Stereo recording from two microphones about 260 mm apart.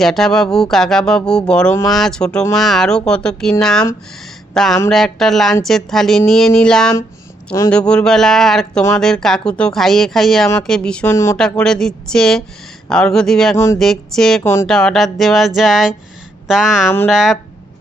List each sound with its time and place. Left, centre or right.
0.0 s speech: centre